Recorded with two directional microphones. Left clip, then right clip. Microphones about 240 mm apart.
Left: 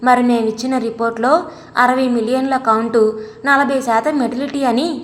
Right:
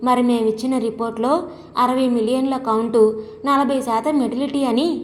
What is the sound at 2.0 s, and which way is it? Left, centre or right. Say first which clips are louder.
Speech: left 2 dB; centre.